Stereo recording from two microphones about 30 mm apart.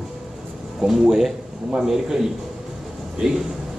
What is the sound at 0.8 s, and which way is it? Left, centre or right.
Speech, centre.